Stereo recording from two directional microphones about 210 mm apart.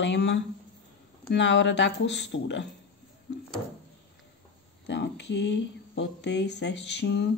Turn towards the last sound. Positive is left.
turn(degrees=55)  # may be behind; listen again after turning